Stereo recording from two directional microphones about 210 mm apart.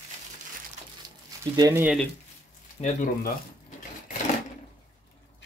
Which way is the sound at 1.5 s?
15° right (ahead or behind).